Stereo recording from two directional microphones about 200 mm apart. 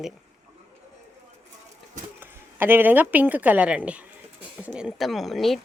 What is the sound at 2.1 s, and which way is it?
A woman's voice, 10° right (ahead or behind).